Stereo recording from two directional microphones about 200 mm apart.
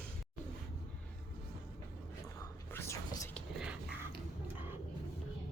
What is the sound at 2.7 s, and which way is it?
Whispering, 15° left (ahead or behind).